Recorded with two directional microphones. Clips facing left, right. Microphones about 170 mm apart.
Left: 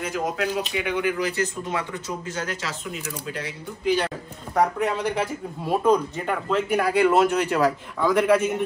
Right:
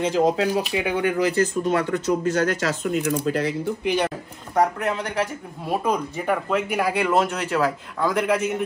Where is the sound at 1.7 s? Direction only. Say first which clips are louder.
Right 8 dB; 65° right (ahead or behind).